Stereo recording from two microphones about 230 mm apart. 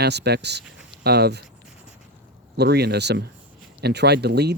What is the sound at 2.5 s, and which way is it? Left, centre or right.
Speech, right.